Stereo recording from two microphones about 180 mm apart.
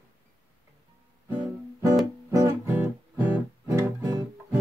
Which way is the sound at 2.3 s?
20° right (ahead or behind).